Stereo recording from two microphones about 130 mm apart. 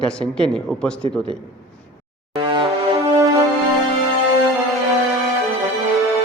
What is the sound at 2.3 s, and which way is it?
Music, 40° right (ahead or behind).